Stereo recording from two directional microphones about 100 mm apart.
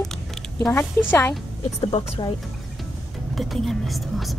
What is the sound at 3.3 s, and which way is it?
Speech, centre (ahead or behind).